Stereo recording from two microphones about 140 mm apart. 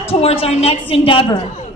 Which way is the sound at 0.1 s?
45° left (ahead or behind).